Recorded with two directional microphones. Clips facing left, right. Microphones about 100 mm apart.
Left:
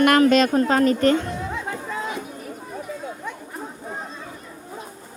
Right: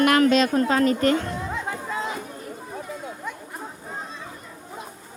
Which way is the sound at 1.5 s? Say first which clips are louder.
Even; 5° right (ahead or behind).